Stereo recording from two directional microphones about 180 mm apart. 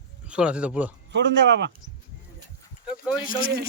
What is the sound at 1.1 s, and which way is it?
Speech, 75° right (ahead or behind).